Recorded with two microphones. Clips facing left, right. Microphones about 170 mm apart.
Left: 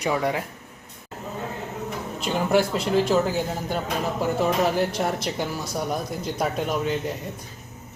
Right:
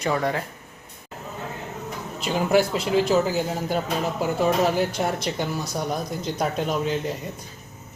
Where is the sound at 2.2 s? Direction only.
5° right (ahead or behind).